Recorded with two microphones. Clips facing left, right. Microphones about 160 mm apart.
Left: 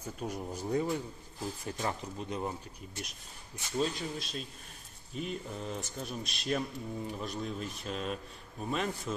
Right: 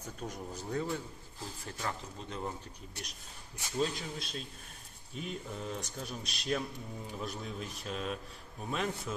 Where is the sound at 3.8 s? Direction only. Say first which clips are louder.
Left 1 dB; centre (ahead or behind).